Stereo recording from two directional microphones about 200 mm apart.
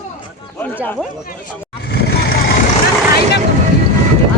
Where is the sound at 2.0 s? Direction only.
50° left (ahead or behind).